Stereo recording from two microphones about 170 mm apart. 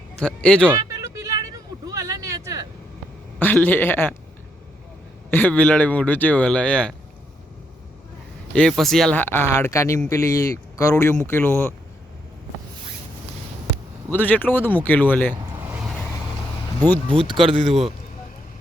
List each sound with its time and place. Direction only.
0.2 s speech: 5° left (ahead or behind)
0.9 s a sound: 20° right (ahead or behind)
3.3 s speech: 10° left (ahead or behind)
5.3 s speech: 10° left (ahead or behind)
8.5 s speech: centre (ahead or behind)
14.1 s speech: 10° left (ahead or behind)
16.8 s speech: 10° left (ahead or behind)